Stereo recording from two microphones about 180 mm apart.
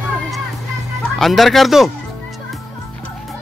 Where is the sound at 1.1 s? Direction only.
Centre (ahead or behind).